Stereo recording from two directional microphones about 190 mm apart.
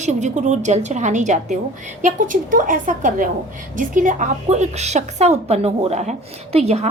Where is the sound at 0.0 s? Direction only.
40° right (ahead or behind).